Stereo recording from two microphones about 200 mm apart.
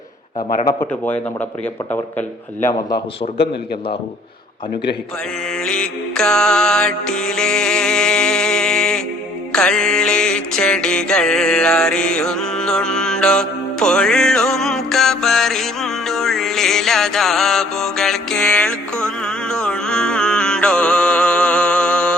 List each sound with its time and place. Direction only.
0.6 s a man's voice: 20° left (ahead or behind)
1.0 s a man's voice: 10° left (ahead or behind)
5.5 s mantra: 5° left (ahead or behind)
9.5 s music: 5° left (ahead or behind)